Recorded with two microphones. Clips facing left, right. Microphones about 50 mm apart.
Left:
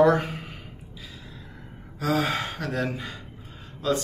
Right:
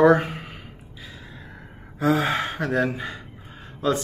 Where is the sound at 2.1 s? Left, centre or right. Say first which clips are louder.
Right 3 dB; centre.